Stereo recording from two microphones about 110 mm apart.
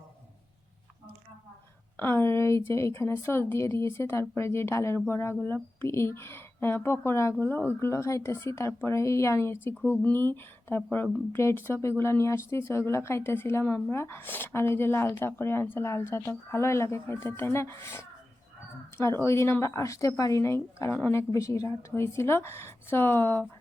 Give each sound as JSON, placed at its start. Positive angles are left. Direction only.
{"t": 2.0, "sound": "speech", "side_deg": 20}